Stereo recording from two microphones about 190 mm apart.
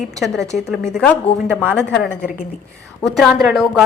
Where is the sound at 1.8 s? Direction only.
65° left (ahead or behind).